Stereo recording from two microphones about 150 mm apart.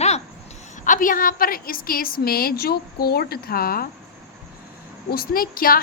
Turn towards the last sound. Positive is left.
turn(degrees=75)  # may be behind; listen again after turning